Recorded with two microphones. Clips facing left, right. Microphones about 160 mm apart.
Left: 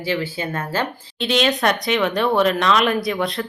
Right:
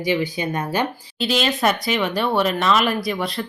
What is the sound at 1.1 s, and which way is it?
Speech, centre (ahead or behind).